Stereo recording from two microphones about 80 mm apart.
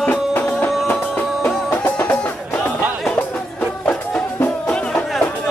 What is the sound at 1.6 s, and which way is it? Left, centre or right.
Music, left.